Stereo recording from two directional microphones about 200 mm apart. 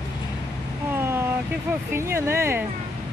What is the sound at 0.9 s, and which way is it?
Speech, 10° right (ahead or behind).